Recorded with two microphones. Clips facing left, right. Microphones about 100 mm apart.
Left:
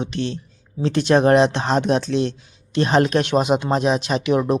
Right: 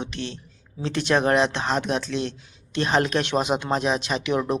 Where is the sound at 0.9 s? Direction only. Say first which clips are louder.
Left 6 dB; 25° left (ahead or behind).